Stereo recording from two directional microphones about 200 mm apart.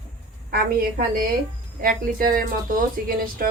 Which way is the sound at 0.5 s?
50° right (ahead or behind).